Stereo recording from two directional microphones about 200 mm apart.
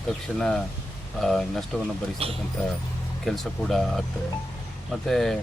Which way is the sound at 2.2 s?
30° right (ahead or behind).